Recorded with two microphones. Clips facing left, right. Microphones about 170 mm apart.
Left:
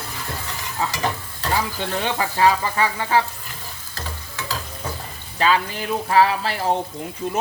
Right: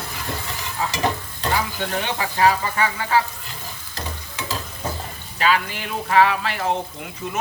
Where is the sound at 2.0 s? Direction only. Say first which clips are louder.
Left 1 dB; 30° left (ahead or behind).